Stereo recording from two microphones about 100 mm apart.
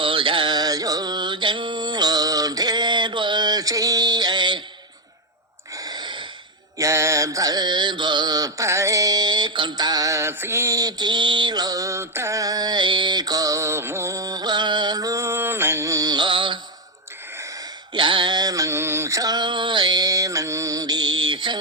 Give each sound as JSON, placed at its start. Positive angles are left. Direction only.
{"t": 0.0, "sound": "music", "side_deg": -60}
{"t": 5.7, "sound": "gasp", "side_deg": -40}
{"t": 6.7, "sound": "mantra", "side_deg": -30}
{"t": 17.9, "sound": "a sound", "side_deg": -55}